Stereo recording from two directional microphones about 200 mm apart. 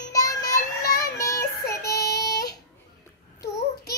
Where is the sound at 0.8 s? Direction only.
50° left (ahead or behind).